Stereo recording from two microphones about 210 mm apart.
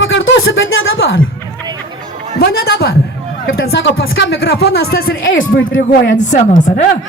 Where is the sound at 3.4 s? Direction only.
65° left (ahead or behind); by 5.4 s 45° left (ahead or behind).